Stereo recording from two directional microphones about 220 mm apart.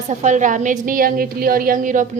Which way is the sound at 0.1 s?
35° right (ahead or behind).